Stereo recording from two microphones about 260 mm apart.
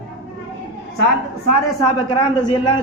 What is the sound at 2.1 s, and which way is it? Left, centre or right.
Speech, centre.